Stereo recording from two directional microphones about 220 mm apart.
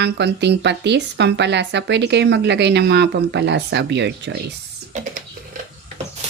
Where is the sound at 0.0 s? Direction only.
50° right (ahead or behind).